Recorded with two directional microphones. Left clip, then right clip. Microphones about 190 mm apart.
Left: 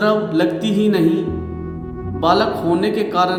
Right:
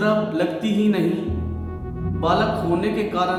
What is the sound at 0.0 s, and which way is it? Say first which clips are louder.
Music: left 4 dB; 25° left (ahead or behind).